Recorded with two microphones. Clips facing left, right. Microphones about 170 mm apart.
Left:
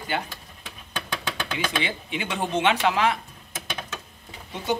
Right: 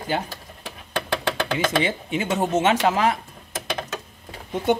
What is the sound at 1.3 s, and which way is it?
Speech, 45° right (ahead or behind).